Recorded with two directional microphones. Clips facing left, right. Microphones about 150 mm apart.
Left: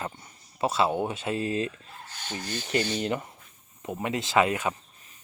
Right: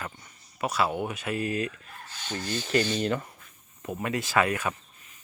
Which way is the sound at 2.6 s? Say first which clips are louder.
Right 1 dB; 20° left (ahead or behind).